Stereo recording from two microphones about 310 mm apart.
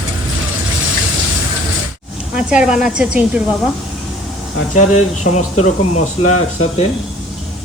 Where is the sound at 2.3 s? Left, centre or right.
Centre.